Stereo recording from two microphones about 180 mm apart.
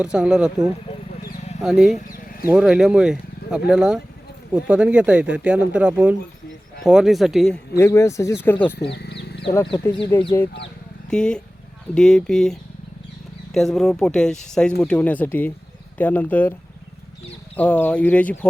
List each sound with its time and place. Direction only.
0.0 s speech: 5° right (ahead or behind)
1.6 s speech: centre (ahead or behind)
2.0 s a sound: 50° left (ahead or behind)
2.5 s speech: 5° right (ahead or behind)
7.8 s speech: 15° left (ahead or behind)
8.8 s wild animals: 65° left (ahead or behind)
10.1 s speech: 10° left (ahead or behind)
17.6 s speech: 10° left (ahead or behind)